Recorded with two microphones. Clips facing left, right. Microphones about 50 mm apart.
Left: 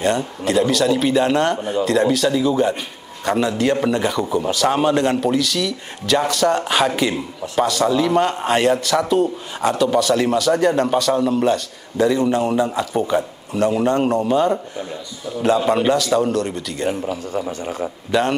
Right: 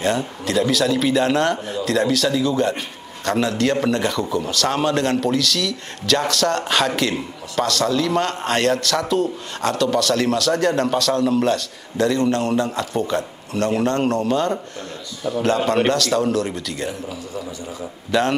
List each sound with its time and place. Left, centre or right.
0.0 s a man's voice: centre
17.5 s speech: left
18.1 s a man's voice: centre